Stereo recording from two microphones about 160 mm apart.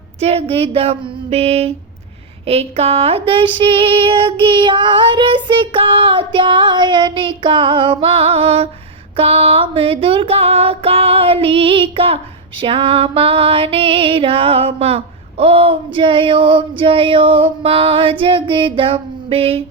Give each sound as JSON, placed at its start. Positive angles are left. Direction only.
{"t": 0.2, "sound": "music", "side_deg": -40}